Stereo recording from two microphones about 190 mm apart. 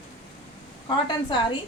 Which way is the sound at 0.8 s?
25° left (ahead or behind).